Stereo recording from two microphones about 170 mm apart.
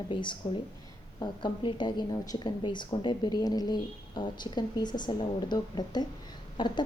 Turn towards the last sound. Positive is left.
turn(degrees=30)  # may be behind; listen again after turning